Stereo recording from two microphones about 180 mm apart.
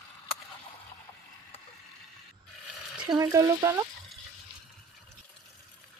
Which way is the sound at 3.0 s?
20° right (ahead or behind).